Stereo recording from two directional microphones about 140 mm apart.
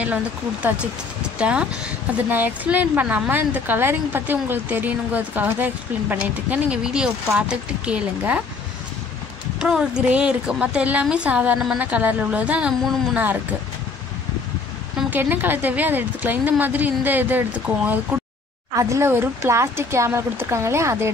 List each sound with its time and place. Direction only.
0.0 s a woman's voice: 10° right (ahead or behind)
9.6 s a woman's voice: 5° right (ahead or behind)
15.0 s a woman's voice: 10° right (ahead or behind)